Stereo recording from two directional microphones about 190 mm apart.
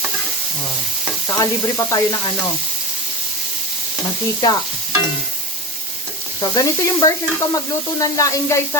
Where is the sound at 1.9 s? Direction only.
15° left (ahead or behind).